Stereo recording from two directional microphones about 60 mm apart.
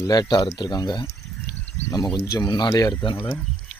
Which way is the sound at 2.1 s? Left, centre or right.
Left.